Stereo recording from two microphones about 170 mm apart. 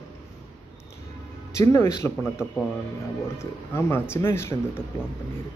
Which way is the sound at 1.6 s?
15° left (ahead or behind).